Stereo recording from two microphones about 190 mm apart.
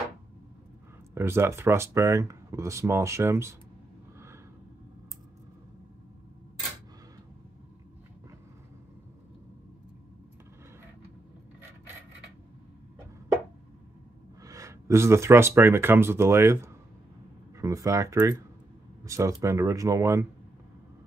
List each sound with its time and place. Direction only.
1.1 s speech: 15° right (ahead or behind)
14.4 s speech: 15° right (ahead or behind)